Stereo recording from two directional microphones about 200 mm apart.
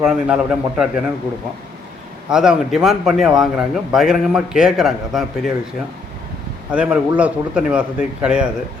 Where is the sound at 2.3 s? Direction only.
5° right (ahead or behind).